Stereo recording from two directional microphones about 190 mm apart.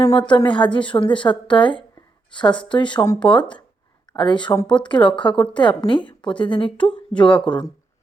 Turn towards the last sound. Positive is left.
turn(degrees=5)  # may be behind; listen again after turning